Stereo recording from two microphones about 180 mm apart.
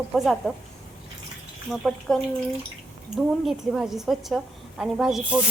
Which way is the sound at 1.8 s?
5° left (ahead or behind).